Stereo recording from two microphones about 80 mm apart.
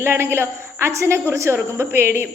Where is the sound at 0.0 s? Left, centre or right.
Right.